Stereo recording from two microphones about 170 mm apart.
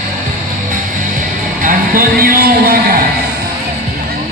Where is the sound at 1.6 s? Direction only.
55° right (ahead or behind).